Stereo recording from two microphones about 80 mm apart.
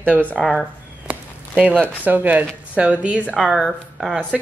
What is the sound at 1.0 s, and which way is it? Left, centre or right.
Speech, centre.